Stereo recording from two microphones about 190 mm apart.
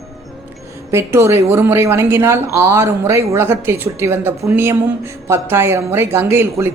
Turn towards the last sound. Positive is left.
turn(degrees=-15)  # may be behind; listen again after turning